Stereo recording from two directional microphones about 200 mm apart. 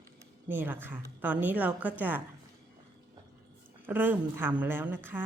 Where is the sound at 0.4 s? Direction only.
10° right (ahead or behind).